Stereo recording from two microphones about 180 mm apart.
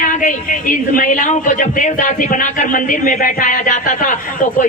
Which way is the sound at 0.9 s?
45° left (ahead or behind).